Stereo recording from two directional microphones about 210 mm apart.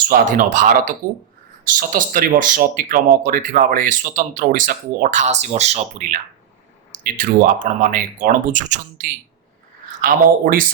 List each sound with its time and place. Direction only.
0.1 s speech: 40° right (ahead or behind)